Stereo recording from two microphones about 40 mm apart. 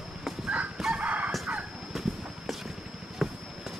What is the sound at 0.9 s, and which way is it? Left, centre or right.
Chicken, right.